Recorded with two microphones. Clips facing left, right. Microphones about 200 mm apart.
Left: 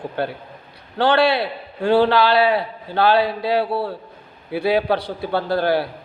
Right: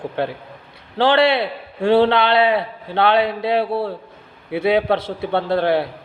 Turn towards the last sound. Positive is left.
turn(degrees=-25)  # may be behind; listen again after turning